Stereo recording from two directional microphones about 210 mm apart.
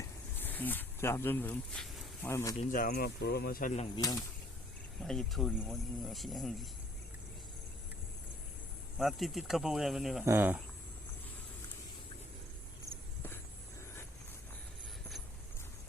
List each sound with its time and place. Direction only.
0.0 s a sound: 10° left (ahead or behind)
2.3 s speech: 15° left (ahead or behind)
2.7 s speech: 45° left (ahead or behind)
3.9 s speech: 15° left (ahead or behind)
4.9 s speech: centre (ahead or behind)
9.0 s speech: centre (ahead or behind)